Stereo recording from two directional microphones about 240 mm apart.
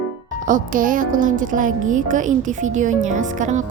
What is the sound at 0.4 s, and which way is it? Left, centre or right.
Speech, right.